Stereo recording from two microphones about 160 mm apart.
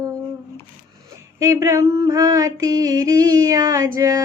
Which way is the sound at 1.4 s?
15° right (ahead or behind).